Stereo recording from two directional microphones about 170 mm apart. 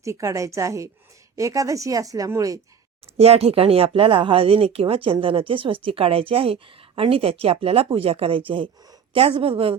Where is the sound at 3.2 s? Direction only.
35° right (ahead or behind).